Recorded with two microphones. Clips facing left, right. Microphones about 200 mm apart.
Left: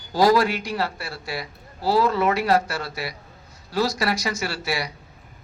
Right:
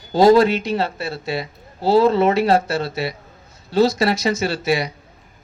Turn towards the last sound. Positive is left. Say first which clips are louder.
# right 7 dB
turn(degrees=-20)  # may be behind; listen again after turning